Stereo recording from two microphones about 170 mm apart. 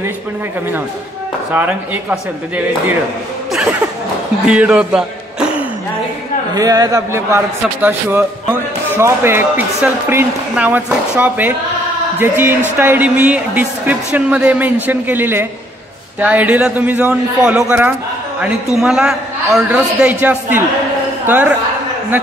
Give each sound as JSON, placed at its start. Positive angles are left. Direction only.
{"t": 1.5, "sound": "speech", "side_deg": -10}
{"t": 4.5, "sound": "speech", "side_deg": -5}
{"t": 6.5, "sound": "speech", "side_deg": -20}